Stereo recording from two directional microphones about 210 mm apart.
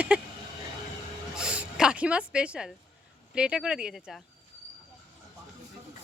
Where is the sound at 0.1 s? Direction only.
5° right (ahead or behind).